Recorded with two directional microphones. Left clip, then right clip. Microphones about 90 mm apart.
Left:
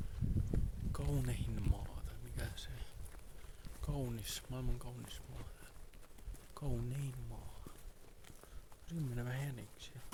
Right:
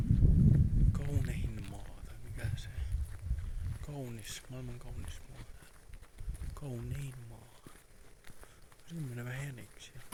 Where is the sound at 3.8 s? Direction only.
20° left (ahead or behind).